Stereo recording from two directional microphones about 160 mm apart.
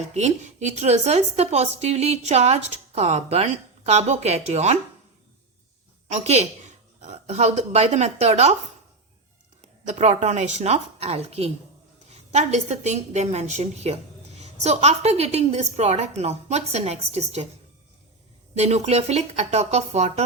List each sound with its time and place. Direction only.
0.1 s a woman's voice: 45° right (ahead or behind)
6.1 s a woman's voice: 45° right (ahead or behind)
9.8 s a woman's voice: 45° right (ahead or behind)
18.5 s a woman's voice: 45° right (ahead or behind)